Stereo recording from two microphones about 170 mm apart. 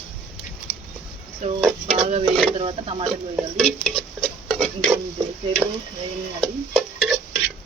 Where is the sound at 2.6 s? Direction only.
30° right (ahead or behind).